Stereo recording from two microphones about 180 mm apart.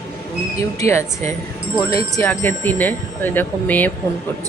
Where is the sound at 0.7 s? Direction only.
15° left (ahead or behind).